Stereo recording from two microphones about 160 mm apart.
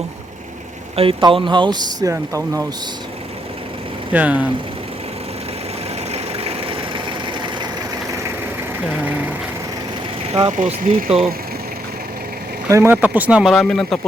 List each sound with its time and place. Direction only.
0.9 s speech: 35° right (ahead or behind); by 2.6 s 20° right (ahead or behind)
4.1 s speech: 10° right (ahead or behind)
6.1 s vehicle: 40° right (ahead or behind)
10.3 s speech: 35° right (ahead or behind)
12.6 s speech: 20° right (ahead or behind); by 14.0 s centre (ahead or behind)